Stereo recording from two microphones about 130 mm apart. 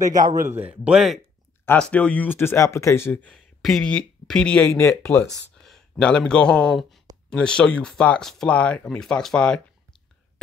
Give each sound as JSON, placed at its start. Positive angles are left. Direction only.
{"t": 0.0, "sound": "a man's voice", "side_deg": -90}
{"t": 0.5, "sound": "a man's voice", "side_deg": -10}
{"t": 1.7, "sound": "speech", "side_deg": 10}
{"t": 5.6, "sound": "speech", "side_deg": 5}